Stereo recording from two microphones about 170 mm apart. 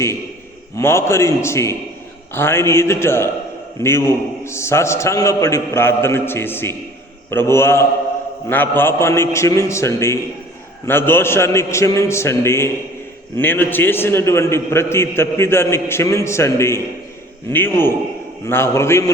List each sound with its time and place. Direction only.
0.8 s a man's voice: 15° left (ahead or behind)